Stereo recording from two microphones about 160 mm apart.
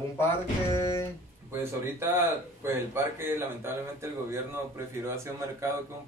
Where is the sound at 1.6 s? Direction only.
15° right (ahead or behind).